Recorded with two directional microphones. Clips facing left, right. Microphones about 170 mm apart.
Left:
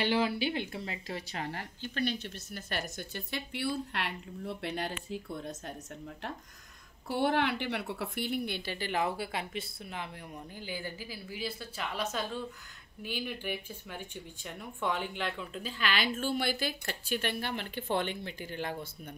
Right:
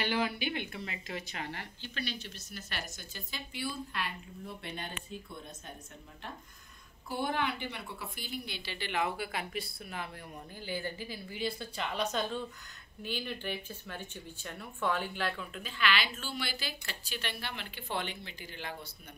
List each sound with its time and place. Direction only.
0.0 s speech: 30° left (ahead or behind); by 5.4 s 80° left
7.1 s a woman's voice: 70° left (ahead or behind); by 10.0 s 20° left (ahead or behind)
10.6 s a woman's voice: 10° left (ahead or behind)
15.6 s speech: 45° left (ahead or behind)